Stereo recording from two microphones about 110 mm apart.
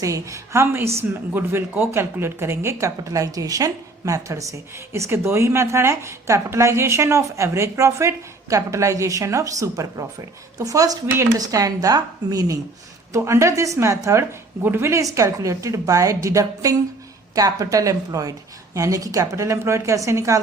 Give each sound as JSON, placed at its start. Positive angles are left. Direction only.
{"t": 0.0, "sound": "speech", "side_deg": -30}